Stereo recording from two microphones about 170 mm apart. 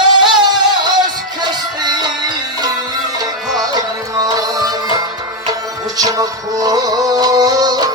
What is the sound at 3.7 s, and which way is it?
Music, 20° right (ahead or behind).